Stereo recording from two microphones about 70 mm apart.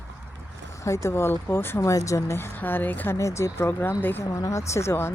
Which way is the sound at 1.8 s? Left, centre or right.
Left.